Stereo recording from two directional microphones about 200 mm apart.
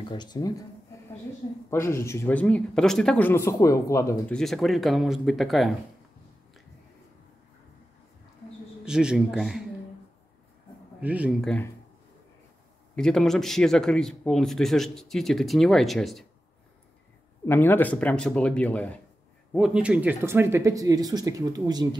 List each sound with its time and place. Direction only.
0.0 s speech: 20° left (ahead or behind)
1.7 s speech: 10° left (ahead or behind)
4.4 s speech: centre (ahead or behind)
8.8 s speech: 5° right (ahead or behind)
11.0 s speech: 5° right (ahead or behind)
12.9 s speech: 5° left (ahead or behind)
17.5 s speech: 10° left (ahead or behind); by 21.8 s 20° right (ahead or behind)